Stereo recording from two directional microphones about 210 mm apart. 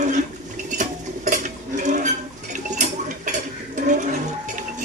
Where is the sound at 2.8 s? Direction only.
35° right (ahead or behind).